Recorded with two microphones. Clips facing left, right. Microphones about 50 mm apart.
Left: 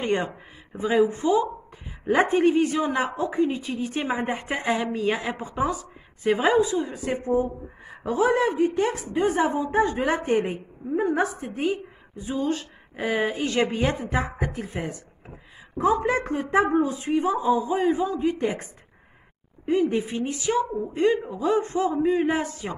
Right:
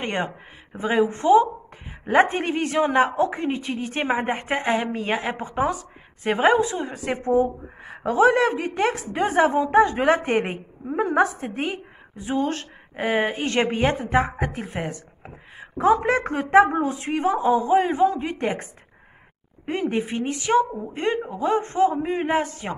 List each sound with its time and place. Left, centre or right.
0.0 s a woman's voice: right
11.0 s speech: right
12.9 s a woman's voice: right